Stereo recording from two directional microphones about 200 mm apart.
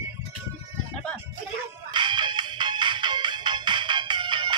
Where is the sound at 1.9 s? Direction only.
20° right (ahead or behind).